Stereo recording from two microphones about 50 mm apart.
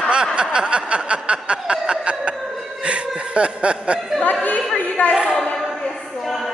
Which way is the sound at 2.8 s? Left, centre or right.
Right.